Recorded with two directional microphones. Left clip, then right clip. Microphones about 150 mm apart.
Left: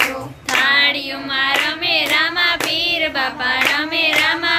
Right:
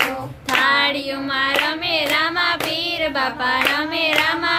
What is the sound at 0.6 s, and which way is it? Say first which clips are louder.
Child singing: left 3 dB; 35° right (ahead or behind).